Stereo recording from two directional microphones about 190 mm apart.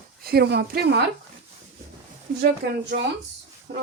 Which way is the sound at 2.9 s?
60° right (ahead or behind).